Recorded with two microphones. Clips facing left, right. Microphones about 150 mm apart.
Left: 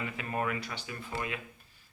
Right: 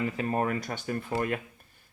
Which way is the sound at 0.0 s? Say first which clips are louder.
Right 6 dB; 35° right (ahead or behind).